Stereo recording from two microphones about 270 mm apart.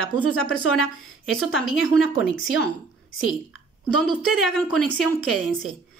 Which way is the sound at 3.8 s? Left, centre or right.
Centre.